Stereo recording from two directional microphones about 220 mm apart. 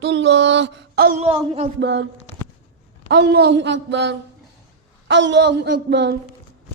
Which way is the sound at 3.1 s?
50° right (ahead or behind).